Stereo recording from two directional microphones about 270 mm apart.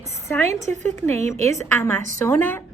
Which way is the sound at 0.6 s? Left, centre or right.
Right.